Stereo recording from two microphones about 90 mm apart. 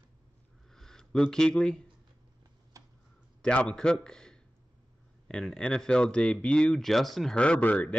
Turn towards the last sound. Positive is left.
turn(degrees=15)  # may be behind; listen again after turning